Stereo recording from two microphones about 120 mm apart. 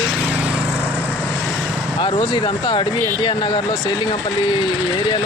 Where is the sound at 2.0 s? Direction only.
45° left (ahead or behind).